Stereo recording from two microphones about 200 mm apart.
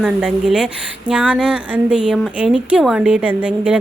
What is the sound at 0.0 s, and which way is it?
A woman's voice, 5° right (ahead or behind).